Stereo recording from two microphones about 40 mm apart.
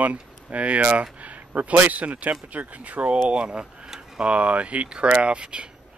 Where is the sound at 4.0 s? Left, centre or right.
Right.